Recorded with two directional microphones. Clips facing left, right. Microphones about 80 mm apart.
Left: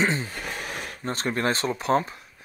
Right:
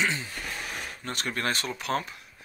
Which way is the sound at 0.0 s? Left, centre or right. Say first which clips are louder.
Left 4 dB; left.